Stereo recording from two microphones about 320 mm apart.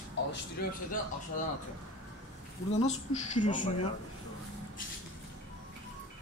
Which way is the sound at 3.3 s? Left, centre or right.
Left.